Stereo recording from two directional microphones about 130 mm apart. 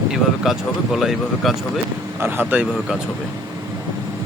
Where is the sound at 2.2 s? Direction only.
15° right (ahead or behind).